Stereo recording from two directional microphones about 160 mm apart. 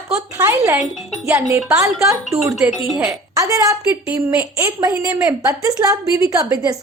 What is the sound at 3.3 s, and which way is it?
A woman's voice, 20° right (ahead or behind).